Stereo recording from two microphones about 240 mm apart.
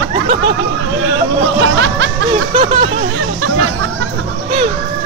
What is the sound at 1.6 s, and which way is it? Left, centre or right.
Snicker, right.